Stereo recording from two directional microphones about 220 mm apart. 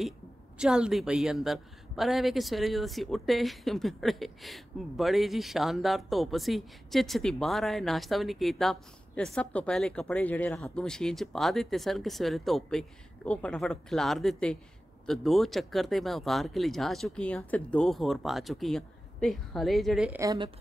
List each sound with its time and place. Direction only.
0.6 s a woman's voice: 5° right (ahead or behind)
20.2 s speech: 20° right (ahead or behind)